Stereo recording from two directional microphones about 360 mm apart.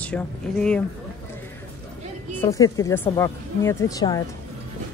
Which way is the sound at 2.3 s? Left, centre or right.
Centre.